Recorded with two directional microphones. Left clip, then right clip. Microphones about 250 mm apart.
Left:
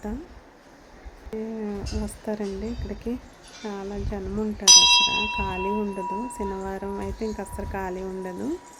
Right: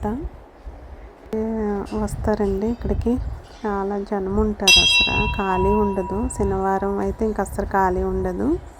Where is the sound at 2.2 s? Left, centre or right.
Centre.